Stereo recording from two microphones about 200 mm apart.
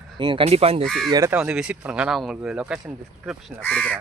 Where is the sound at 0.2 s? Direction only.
25° right (ahead or behind).